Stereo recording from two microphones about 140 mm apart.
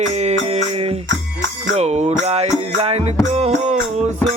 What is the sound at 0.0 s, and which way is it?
Music, 50° right (ahead or behind).